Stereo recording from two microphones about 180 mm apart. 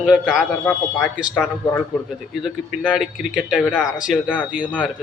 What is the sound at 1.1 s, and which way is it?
A man's voice, 5° right (ahead or behind).